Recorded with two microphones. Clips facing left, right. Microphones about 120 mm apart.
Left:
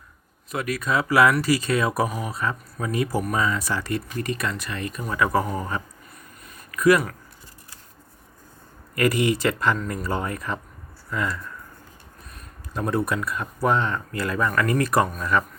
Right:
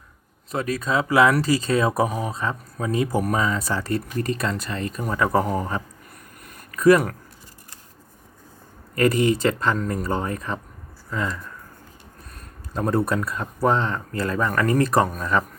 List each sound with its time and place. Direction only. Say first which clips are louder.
0.5 s speech: right 1 dB; 30° right (ahead or behind)
3.2 s speech: right 2 dB; 40° right (ahead or behind)
3.4 s speech: right 1 dB; 30° right (ahead or behind)
6.7 s a sound: right 3 dB; 30° right (ahead or behind)
9.0 s speech: right 2 dB; 30° right (ahead or behind)
12.7 s speech: right 2 dB; 35° right (ahead or behind)